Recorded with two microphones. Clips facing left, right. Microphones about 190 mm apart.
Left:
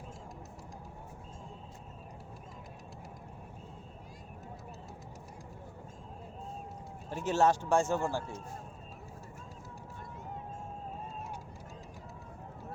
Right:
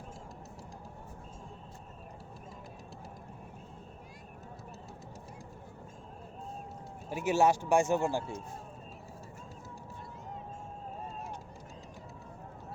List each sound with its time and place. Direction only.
7.1 s speech: 10° right (ahead or behind)